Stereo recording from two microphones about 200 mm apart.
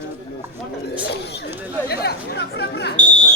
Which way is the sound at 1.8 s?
55° left (ahead or behind).